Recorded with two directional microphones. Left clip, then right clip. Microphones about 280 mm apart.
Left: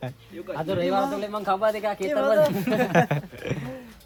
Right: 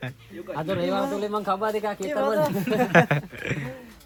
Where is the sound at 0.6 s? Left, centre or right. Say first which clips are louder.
Left 2 dB; centre.